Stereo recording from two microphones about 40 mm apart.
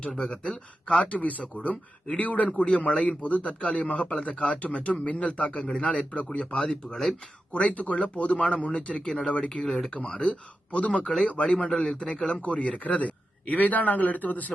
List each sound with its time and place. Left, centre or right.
0.2 s speech: left
7.5 s speech: left
9.6 s speech: centre
9.9 s speech: left
12.4 s speech: left